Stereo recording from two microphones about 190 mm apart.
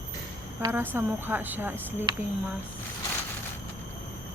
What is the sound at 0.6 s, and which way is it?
Speech, 10° right (ahead or behind).